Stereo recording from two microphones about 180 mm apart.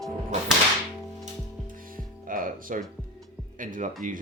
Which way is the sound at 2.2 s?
50° right (ahead or behind).